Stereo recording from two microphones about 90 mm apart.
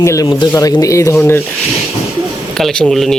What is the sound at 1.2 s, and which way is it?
Speech, 25° left (ahead or behind).